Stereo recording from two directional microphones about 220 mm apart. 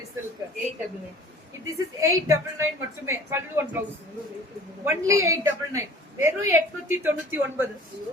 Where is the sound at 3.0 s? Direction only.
10° right (ahead or behind).